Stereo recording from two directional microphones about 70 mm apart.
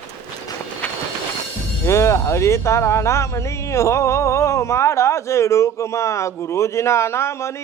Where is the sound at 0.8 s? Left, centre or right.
Centre.